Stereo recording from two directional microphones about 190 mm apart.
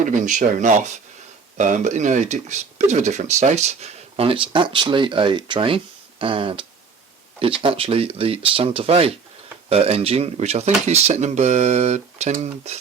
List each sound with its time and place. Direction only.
0.0 s speech: 40° right (ahead or behind)